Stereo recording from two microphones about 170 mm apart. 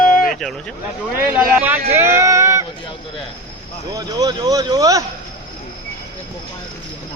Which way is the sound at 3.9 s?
25° right (ahead or behind).